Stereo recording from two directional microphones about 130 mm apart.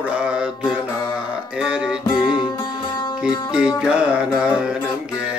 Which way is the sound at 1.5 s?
5° right (ahead or behind).